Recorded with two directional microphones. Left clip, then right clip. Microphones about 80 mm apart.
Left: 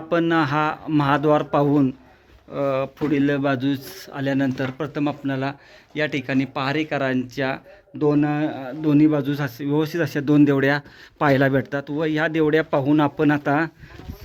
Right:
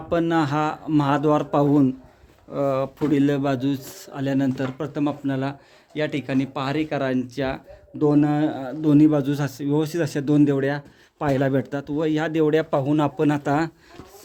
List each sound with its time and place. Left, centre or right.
0.1 s a man's voice: centre; by 3.3 s right
3.3 s a man's voice: centre
7.9 s a man's voice: right; by 10.5 s centre
10.5 s speech: left
11.5 s a man's voice: centre